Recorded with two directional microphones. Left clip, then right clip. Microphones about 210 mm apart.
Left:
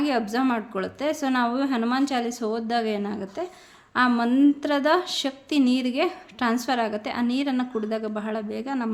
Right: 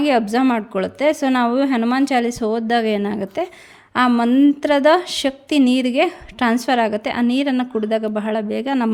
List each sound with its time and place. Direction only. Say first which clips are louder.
0.0 s speech: right 8 dB; 35° right (ahead or behind)